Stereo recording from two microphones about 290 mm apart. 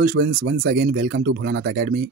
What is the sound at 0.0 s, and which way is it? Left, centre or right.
Speech, right.